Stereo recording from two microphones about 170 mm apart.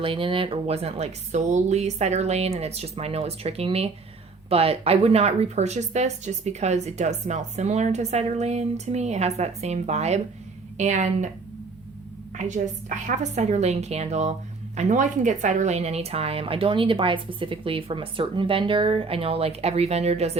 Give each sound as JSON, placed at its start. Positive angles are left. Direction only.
{"t": 0.0, "sound": "a woman's voice", "side_deg": -30}
{"t": 12.4, "sound": "speech", "side_deg": -45}